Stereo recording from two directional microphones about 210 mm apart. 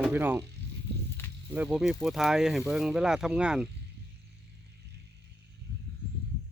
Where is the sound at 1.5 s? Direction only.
5° right (ahead or behind).